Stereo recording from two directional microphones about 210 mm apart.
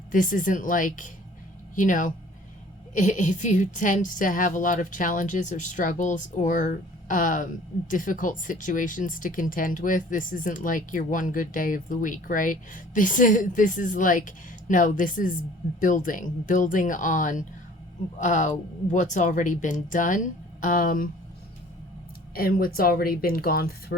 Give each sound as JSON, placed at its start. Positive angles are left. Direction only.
{"t": 0.1, "sound": "speech", "side_deg": 40}
{"t": 22.4, "sound": "speech", "side_deg": 45}